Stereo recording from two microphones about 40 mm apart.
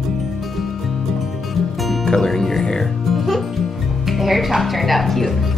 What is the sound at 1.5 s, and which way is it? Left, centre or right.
Music, centre.